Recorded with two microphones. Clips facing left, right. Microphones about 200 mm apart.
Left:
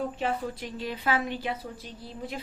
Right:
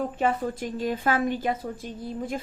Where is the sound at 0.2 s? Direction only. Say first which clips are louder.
Right 5 dB; 45° right (ahead or behind).